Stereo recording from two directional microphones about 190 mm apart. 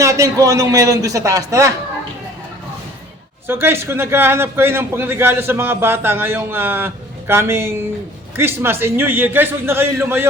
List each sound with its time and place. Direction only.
0.0 s a man's voice: 15° right (ahead or behind)
3.4 s a man's voice: 10° right (ahead or behind)